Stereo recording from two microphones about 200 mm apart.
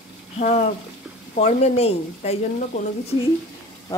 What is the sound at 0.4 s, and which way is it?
Speech, 35° left (ahead or behind).